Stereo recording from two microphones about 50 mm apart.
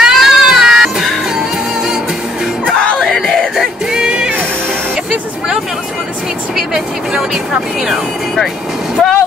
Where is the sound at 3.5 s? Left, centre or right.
Centre.